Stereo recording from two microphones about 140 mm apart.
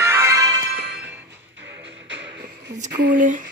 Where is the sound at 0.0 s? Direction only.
20° right (ahead or behind).